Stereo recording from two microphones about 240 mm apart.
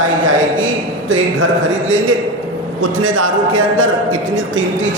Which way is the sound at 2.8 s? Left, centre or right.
Right.